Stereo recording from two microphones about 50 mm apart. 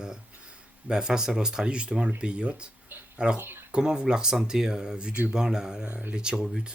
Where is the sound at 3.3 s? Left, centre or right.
Right.